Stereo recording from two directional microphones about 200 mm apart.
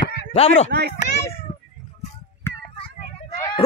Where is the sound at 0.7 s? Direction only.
50° right (ahead or behind).